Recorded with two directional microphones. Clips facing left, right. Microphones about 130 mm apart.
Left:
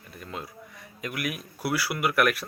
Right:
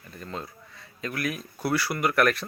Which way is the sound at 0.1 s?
10° left (ahead or behind).